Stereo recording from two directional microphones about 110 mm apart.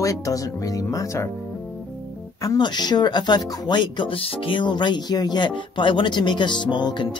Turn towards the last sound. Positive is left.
turn(degrees=45)  # may be behind; listen again after turning